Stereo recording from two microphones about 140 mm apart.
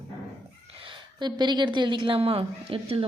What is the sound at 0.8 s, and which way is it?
A woman's voice, 30° right (ahead or behind).